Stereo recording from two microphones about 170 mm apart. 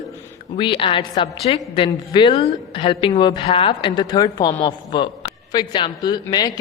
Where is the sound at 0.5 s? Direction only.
30° left (ahead or behind).